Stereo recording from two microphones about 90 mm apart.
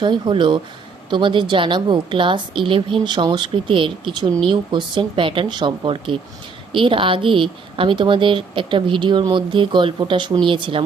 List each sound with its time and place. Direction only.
0.0 s a woman's voice: 60° right (ahead or behind)
4.3 s speech: 10° left (ahead or behind)
4.7 s a woman's voice: 65° right (ahead or behind)